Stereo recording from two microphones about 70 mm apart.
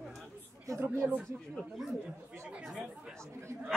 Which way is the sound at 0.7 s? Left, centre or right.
Right.